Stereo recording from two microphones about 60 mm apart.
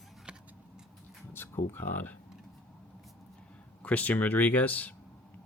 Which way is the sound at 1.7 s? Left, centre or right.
Left.